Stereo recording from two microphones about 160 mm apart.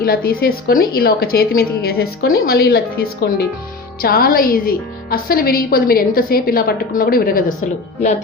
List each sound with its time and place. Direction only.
0.0 s a woman's voice: 75° left (ahead or behind)
4.0 s a woman's voice: 70° left (ahead or behind)